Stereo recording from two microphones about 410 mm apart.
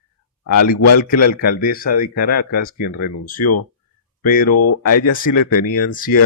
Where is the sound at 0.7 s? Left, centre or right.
Left.